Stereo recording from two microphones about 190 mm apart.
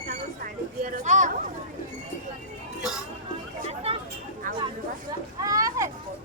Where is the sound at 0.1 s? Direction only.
45° right (ahead or behind).